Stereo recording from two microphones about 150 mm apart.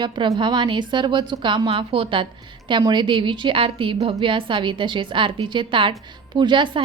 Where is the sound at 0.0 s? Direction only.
30° right (ahead or behind).